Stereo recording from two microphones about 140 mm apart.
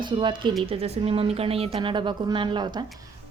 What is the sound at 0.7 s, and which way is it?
A woman's voice, 45° right (ahead or behind).